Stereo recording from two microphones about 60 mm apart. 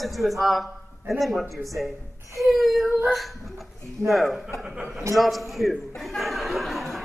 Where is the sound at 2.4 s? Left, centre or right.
Centre.